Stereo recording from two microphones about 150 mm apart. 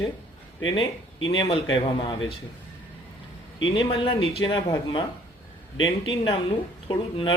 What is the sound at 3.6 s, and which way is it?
Speech, 35° left (ahead or behind).